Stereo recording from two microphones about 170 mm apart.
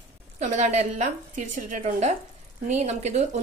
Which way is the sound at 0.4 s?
45° right (ahead or behind).